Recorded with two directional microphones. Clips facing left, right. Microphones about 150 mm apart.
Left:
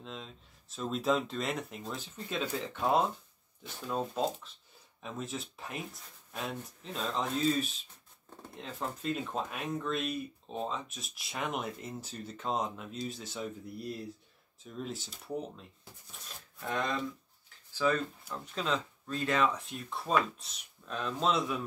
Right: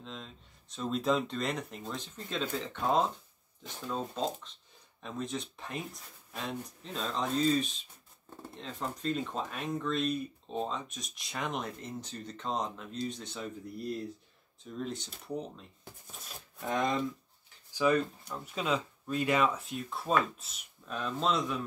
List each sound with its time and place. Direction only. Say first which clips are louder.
0.0 s speech: left 1 dB; 5° left (ahead or behind)
14.6 s speech: right 2 dB; 5° left (ahead or behind)
16.5 s speech: right 3 dB; 15° right (ahead or behind); by 21.5 s centre (ahead or behind)